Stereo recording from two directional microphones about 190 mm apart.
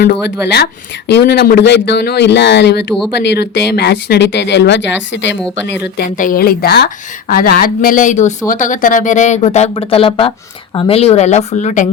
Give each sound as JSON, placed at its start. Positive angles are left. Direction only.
{"t": 0.0, "sound": "speech", "side_deg": 60}
{"t": 6.1, "sound": "speech", "side_deg": 45}